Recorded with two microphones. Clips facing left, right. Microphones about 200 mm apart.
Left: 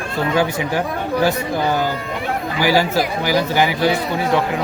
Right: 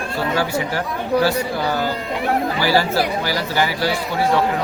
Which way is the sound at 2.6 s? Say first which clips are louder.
Left 4 dB; 15° left (ahead or behind).